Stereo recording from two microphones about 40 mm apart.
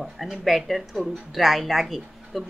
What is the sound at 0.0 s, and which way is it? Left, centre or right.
A woman's voice, centre.